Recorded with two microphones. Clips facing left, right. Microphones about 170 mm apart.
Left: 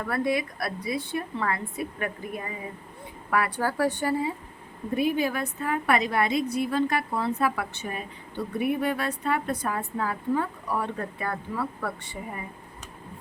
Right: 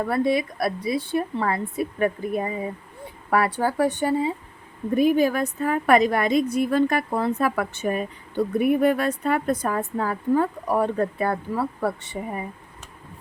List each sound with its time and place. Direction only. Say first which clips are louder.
0.0 s speech: right 5 dB; 25° right (ahead or behind)
4.9 s a woman's voice: right 6 dB; 45° right (ahead or behind)